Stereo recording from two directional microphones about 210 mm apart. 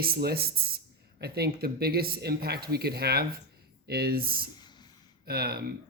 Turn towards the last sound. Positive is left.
turn(degrees=-45)  # may be behind; listen again after turning